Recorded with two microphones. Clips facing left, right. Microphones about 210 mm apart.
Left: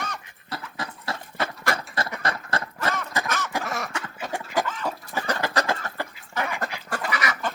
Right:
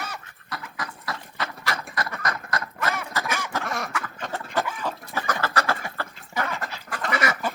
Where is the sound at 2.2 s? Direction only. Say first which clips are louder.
Left 1 dB; 30° left (ahead or behind).